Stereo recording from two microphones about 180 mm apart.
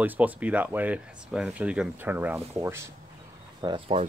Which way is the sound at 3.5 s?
25° right (ahead or behind).